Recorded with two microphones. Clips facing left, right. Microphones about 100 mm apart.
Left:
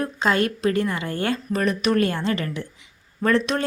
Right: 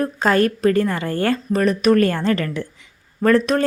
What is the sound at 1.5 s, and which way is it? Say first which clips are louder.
A woman's voice: right 6 dB; 35° right (ahead or behind).